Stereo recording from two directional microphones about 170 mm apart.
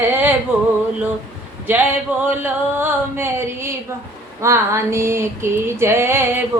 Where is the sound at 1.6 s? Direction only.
10° right (ahead or behind).